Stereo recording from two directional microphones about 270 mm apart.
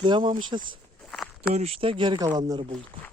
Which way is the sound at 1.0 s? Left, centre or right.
Centre.